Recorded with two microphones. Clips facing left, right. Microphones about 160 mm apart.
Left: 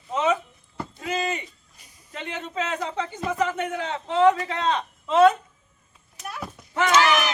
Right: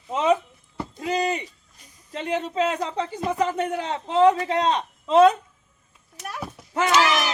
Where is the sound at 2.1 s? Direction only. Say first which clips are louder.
Right 6 dB; 35° right (ahead or behind).